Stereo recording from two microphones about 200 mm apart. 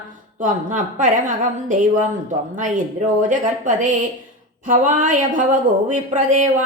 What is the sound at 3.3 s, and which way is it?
A woman's voice, 40° right (ahead or behind).